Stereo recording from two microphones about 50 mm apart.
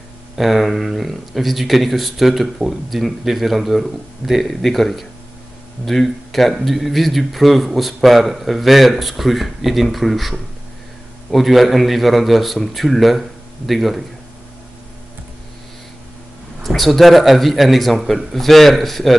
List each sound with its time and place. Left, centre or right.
0.4 s speech: centre
16.6 s speech: centre